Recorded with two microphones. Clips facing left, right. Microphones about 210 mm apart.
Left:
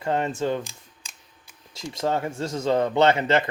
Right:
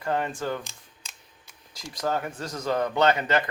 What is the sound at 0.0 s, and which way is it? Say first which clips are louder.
Speech: left 3 dB; 25° left (ahead or behind).